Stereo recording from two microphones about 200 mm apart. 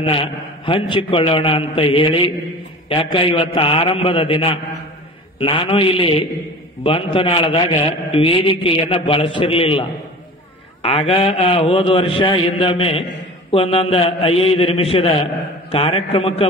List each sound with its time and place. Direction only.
0.0 s mantra: 25° left (ahead or behind)